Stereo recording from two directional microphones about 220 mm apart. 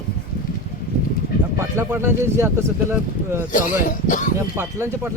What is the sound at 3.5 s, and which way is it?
Speech, 35° left (ahead or behind).